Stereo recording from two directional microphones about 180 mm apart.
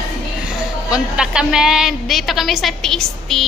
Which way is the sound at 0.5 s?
5° right (ahead or behind).